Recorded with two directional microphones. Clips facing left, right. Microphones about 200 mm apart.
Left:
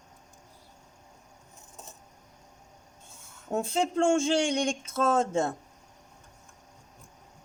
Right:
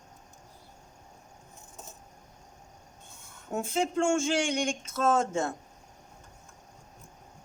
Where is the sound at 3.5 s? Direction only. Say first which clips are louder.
Left 1 dB; 35° left (ahead or behind).